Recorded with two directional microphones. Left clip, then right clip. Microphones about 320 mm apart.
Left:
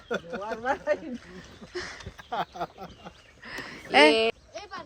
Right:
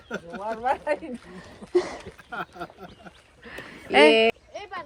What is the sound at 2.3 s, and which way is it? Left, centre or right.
Speech, centre.